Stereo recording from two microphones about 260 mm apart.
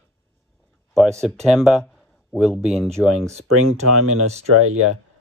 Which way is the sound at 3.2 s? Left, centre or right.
Right.